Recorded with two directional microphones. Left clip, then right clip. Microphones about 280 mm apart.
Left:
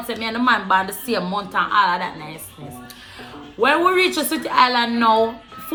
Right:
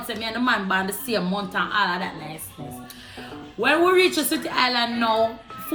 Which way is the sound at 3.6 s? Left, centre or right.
Centre.